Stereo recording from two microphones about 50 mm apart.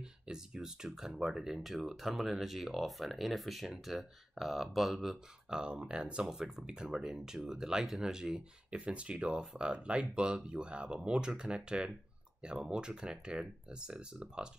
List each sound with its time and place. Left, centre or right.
0.3 s speech: centre
5.5 s speech: centre
8.7 s speech: right